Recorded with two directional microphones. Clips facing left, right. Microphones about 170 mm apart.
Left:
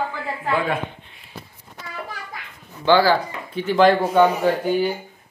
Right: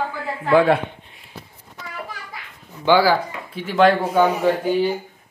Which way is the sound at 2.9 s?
10° right (ahead or behind).